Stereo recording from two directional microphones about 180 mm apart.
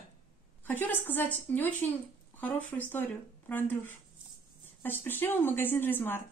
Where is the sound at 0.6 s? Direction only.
10° left (ahead or behind).